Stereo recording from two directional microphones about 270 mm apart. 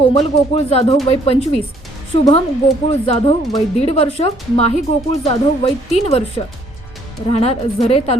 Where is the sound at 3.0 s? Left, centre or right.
Left.